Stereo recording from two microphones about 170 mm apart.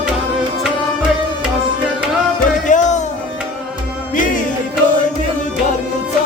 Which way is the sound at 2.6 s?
45° left (ahead or behind).